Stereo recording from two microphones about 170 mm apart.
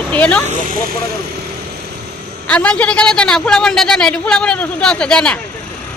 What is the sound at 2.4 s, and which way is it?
A man's voice, 5° left (ahead or behind).